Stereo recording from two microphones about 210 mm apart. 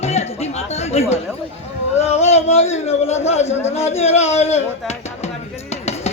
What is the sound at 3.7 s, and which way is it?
Music, 30° left (ahead or behind).